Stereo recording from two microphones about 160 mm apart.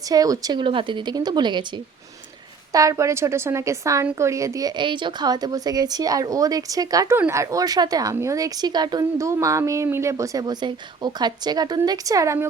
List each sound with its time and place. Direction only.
0.0 s speech: 20° right (ahead or behind)